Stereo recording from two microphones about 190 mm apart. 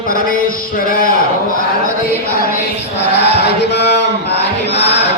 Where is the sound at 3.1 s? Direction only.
60° left (ahead or behind).